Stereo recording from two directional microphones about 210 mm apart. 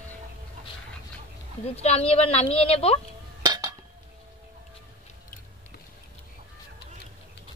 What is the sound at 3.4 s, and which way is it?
Chink, 20° right (ahead or behind).